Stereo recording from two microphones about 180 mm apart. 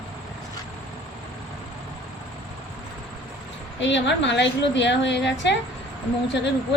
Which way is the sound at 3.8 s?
80° left.